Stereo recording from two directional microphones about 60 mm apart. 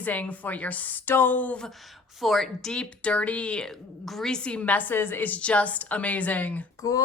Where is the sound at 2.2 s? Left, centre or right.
Centre.